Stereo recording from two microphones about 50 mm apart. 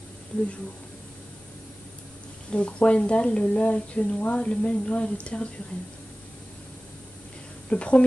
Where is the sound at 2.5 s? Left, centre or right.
Left.